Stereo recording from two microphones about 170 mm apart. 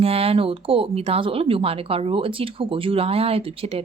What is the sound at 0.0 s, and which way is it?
Speech, 35° right (ahead or behind).